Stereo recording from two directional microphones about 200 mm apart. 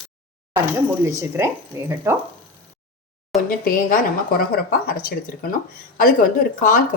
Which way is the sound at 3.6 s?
45° left (ahead or behind).